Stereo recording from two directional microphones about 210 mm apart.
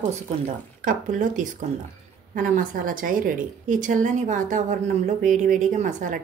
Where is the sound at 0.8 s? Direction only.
35° right (ahead or behind).